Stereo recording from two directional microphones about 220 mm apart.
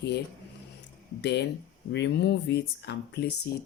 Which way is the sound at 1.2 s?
50° left (ahead or behind).